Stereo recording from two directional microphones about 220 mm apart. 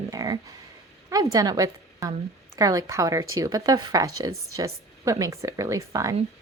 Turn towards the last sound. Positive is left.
turn(degrees=-15)  # may be behind; listen again after turning